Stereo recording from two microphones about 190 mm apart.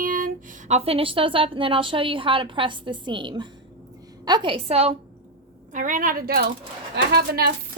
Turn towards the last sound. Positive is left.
turn(degrees=-55)  # may be behind; listen again after turning